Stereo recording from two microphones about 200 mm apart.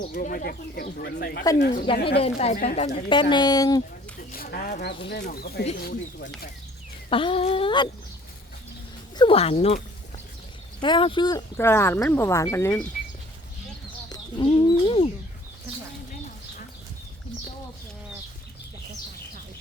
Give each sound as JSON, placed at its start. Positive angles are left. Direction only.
{"t": 0.1, "sound": "speech", "side_deg": 40}
{"t": 2.2, "sound": "a woman's voice", "side_deg": 35}
{"t": 4.3, "sound": "speech", "side_deg": 50}
{"t": 7.1, "sound": "a woman's voice", "side_deg": 25}
{"t": 9.1, "sound": "a woman's voice", "side_deg": 25}
{"t": 14.1, "sound": "bird", "side_deg": 25}